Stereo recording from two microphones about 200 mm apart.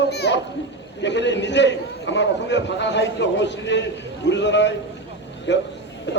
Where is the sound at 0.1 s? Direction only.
55° left (ahead or behind).